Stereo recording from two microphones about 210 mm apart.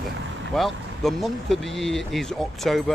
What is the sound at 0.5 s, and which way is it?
Speech, centre (ahead or behind).